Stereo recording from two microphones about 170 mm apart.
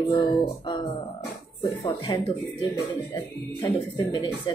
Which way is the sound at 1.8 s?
30° left (ahead or behind).